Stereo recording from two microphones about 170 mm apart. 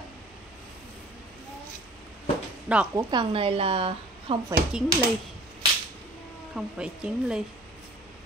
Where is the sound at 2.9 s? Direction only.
30° right (ahead or behind).